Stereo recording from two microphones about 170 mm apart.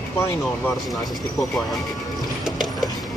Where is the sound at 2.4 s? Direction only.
Centre (ahead or behind).